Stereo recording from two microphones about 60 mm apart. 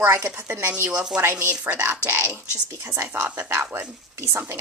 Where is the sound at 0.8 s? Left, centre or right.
Centre.